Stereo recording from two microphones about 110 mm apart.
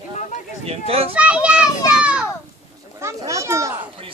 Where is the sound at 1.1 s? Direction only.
10° right (ahead or behind).